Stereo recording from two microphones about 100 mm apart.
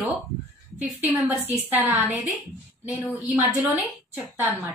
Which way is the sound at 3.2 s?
15° right (ahead or behind).